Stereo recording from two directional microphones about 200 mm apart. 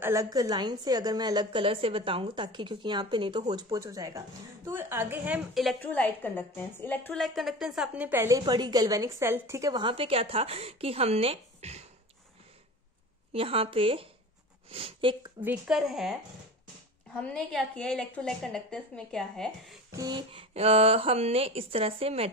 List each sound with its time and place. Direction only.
0.0 s a woman's voice: 15° right (ahead or behind); by 11.8 s 30° right (ahead or behind)
13.3 s a woman's voice: 30° right (ahead or behind)
15.4 s a woman's voice: 5° right (ahead or behind)
20.0 s a woman's voice: 20° right (ahead or behind)